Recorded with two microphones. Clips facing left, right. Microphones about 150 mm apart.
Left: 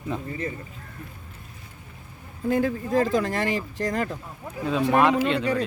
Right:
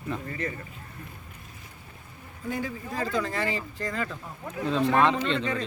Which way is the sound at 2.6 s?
50° left (ahead or behind).